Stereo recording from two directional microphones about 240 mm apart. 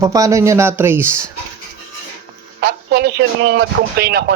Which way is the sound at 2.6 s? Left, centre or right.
Right.